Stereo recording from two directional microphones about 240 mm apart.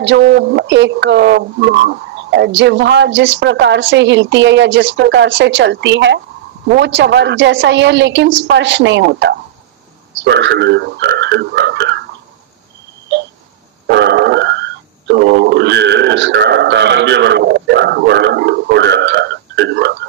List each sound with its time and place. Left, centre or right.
0.0 s speech: right
13.8 s speech: right